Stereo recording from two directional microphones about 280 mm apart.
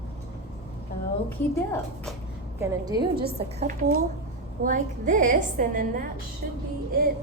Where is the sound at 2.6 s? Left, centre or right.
Centre.